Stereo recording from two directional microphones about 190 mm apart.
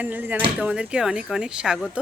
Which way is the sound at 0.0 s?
10° right (ahead or behind).